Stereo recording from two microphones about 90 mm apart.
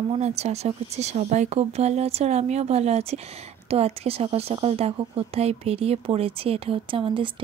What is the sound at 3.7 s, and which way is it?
Speech, 90° right.